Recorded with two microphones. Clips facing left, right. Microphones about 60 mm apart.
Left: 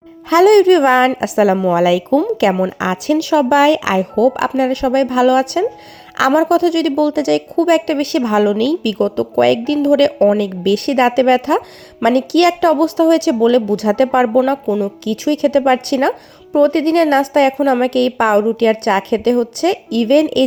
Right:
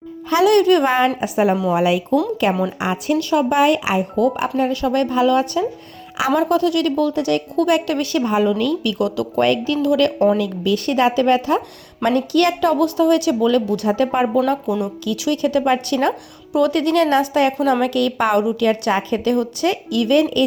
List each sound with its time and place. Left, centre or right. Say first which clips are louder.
0.3 s a woman's voice: left 5 dB; left
1.2 s a woman's voice: left 4 dB; left
2.4 s speech: left 6 dB; left
2.7 s speech: left 4 dB; left
4.1 s a woman's voice: left 4 dB; left
5.1 s a woman's voice: left 4 dB; left
6.1 s a woman's voice: left 5 dB; left
7.5 s a woman's voice: left 4 dB; left
8.3 s a woman's voice: left 4 dB; left
9.4 s a woman's voice: left 4 dB; left
16.6 s a woman's voice: left 4 dB; left